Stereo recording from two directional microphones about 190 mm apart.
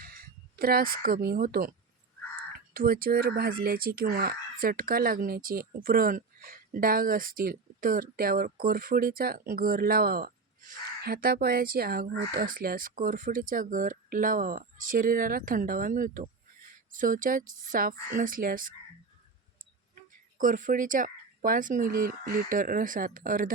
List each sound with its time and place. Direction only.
0.0 s speech: 50° right (ahead or behind)
20.4 s speech: 45° right (ahead or behind)